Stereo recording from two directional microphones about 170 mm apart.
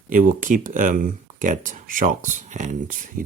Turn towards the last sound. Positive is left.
turn(degrees=-55)  # may be behind; listen again after turning